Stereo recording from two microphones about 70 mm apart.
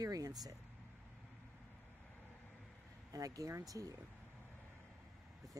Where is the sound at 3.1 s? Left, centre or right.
Right.